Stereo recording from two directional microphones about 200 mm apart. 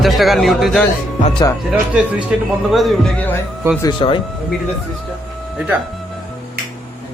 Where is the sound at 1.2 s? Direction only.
25° left (ahead or behind).